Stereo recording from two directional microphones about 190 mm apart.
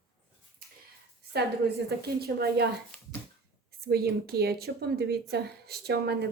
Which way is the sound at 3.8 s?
55° right (ahead or behind).